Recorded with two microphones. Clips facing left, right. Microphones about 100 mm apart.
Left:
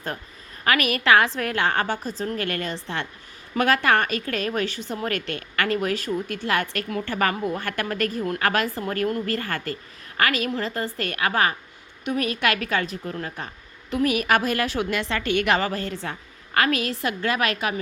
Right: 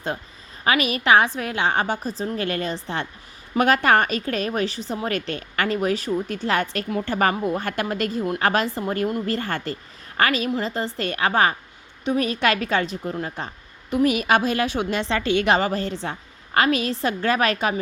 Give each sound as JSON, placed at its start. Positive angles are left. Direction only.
{"t": 0.6, "sound": "a woman's voice", "side_deg": -20}